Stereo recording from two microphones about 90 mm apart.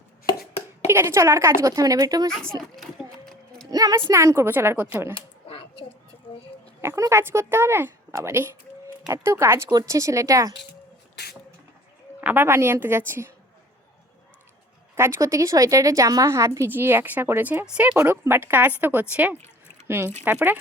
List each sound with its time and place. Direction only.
0.9 s a woman's voice: 30° right (ahead or behind)
2.7 s a sound: centre (ahead or behind)
3.7 s a woman's voice: 45° right (ahead or behind)
4.1 s a woman's voice: 35° right (ahead or behind)
5.1 s a sound: 80° left
6.8 s a woman's voice: 30° right (ahead or behind)
12.2 s a woman's voice: 20° right (ahead or behind)
14.9 s a woman's voice: 30° right (ahead or behind)